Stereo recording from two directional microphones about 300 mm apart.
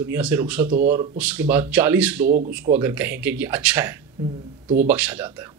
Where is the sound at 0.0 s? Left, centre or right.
Centre.